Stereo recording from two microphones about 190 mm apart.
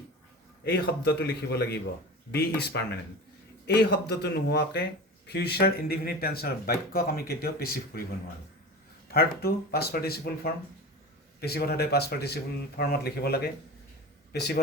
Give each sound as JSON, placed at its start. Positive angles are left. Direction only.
{"t": 0.6, "sound": "speech", "side_deg": 60}
{"t": 9.0, "sound": "speech", "side_deg": 55}